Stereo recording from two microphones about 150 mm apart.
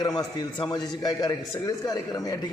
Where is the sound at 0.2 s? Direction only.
30° left (ahead or behind).